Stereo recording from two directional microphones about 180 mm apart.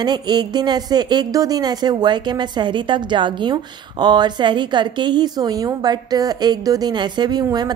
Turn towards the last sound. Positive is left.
turn(degrees=-20)  # may be behind; listen again after turning